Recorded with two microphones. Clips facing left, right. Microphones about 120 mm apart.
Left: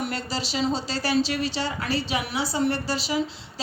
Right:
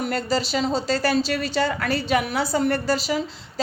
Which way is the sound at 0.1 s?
45° right (ahead or behind).